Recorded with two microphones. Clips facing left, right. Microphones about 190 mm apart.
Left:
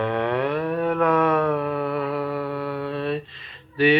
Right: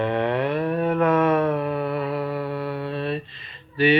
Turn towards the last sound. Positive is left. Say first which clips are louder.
# even
turn(degrees=0)  # may be behind; listen again after turning